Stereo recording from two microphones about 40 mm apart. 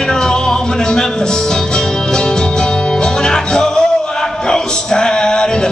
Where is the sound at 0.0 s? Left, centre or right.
Centre.